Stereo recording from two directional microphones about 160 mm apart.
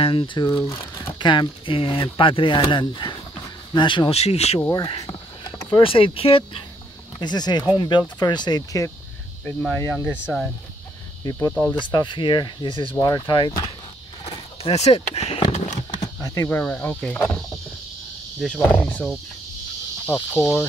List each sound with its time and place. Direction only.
0.0 s speech: 30° left (ahead or behind)
0.5 s speech: 20° left (ahead or behind); by 4.6 s 40° left (ahead or behind)
4.6 s speech: 20° left (ahead or behind)
5.0 s a sound: 30° left (ahead or behind)
7.2 s speech: 25° left (ahead or behind)
9.4 s cricket: 10° left (ahead or behind)
10.2 s speech: centre (ahead or behind)
11.2 s speech: 20° left (ahead or behind)
14.2 s a sound: 40° left (ahead or behind)
16.0 s a sound: 20° left (ahead or behind)
16.4 s cricket: 10° left (ahead or behind)
18.4 s cricket: 5° left (ahead or behind)
20.1 s cricket: 15° left (ahead or behind)